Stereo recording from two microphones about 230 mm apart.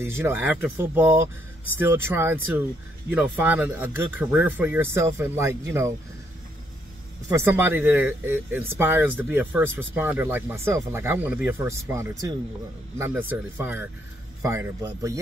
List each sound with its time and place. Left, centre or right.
0.0 s speech: centre
7.3 s speech: centre